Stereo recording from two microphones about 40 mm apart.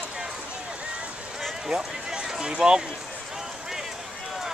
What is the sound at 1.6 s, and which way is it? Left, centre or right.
Run, centre.